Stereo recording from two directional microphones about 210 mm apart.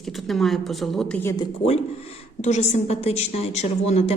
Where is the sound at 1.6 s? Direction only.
30° left (ahead or behind).